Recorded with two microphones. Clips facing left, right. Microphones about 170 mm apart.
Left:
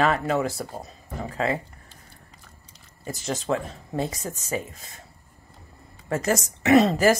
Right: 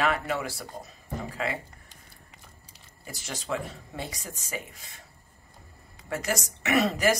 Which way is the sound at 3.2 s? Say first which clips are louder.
Left 6 dB; 35° left (ahead or behind).